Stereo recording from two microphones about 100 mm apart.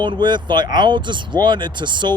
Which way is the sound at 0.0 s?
50° right (ahead or behind).